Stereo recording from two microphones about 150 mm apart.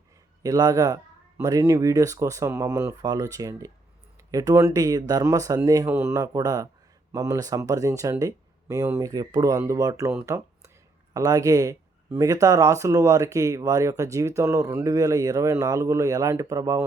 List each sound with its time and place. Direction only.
0.4 s speech: 25° right (ahead or behind)
10.2 s a sound: 20° right (ahead or behind)
11.1 s speech: 25° right (ahead or behind)